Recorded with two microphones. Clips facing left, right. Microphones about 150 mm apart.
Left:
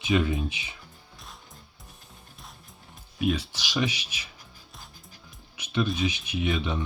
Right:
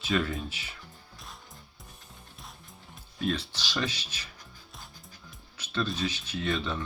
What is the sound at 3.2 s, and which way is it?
Speech, 10° left (ahead or behind).